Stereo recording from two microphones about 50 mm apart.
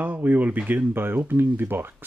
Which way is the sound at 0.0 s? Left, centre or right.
Right.